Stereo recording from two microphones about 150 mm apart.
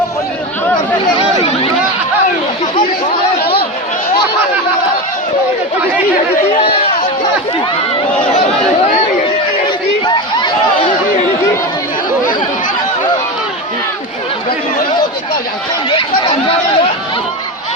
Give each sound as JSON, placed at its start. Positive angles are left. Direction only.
{"t": 6.5, "sound": "chatter", "side_deg": 40}
{"t": 15.9, "sound": "chatter", "side_deg": 35}